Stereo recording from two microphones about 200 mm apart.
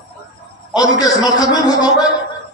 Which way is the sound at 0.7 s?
20° left (ahead or behind).